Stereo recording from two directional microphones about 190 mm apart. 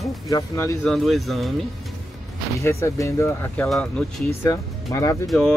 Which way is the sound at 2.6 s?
15° left (ahead or behind).